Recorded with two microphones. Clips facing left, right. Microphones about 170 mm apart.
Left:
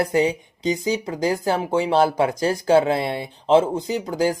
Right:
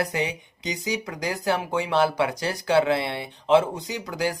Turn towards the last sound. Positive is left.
turn(degrees=45)  # may be behind; listen again after turning